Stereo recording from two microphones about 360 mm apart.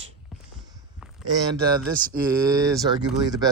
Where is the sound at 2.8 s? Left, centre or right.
Centre.